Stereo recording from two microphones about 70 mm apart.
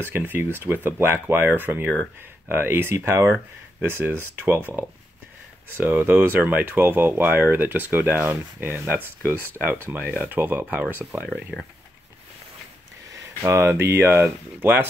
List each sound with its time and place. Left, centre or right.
0.0 s speech: right
13.4 s speech: right
13.7 s speech: right